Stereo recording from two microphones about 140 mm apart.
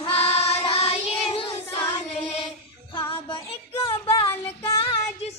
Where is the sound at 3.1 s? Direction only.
40° left (ahead or behind).